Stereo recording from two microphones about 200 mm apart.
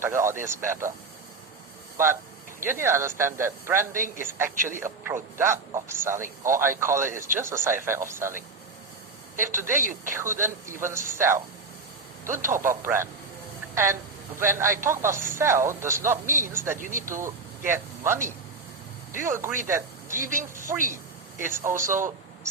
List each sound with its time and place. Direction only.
0.0 s a man's voice: 10° right (ahead or behind)
2.6 s a man's voice: 10° right (ahead or behind)
9.5 s a man's voice: 10° right (ahead or behind)
12.2 s speech: 40° right (ahead or behind)
12.5 s a man's voice: 10° right (ahead or behind)
16.7 s speech: 40° right (ahead or behind)
17.2 s a man's voice: 10° right (ahead or behind)
20.2 s speech: 40° right (ahead or behind)
20.8 s a sound: 40° right (ahead or behind)
21.4 s a man's voice: 10° right (ahead or behind)